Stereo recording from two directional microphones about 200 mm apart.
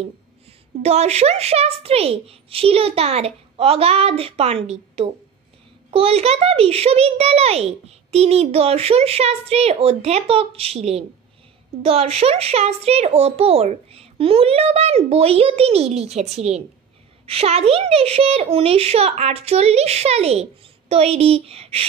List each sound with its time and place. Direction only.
0.8 s a child's voice: 30° right (ahead or behind)